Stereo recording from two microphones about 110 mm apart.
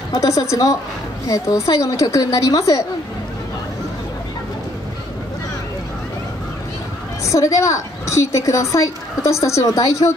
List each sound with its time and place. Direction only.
0.1 s a woman's voice: 30° left (ahead or behind)
7.2 s a woman's voice: 30° left (ahead or behind)